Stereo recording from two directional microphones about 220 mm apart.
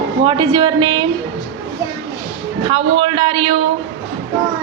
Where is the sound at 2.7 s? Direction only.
25° right (ahead or behind).